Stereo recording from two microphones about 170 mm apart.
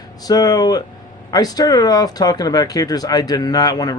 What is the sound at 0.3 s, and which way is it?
Speech, 20° left (ahead or behind).